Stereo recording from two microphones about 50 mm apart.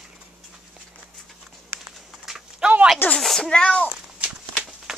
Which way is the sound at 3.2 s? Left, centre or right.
Centre.